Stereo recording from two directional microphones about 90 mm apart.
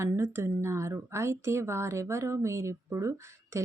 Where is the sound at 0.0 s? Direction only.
25° right (ahead or behind).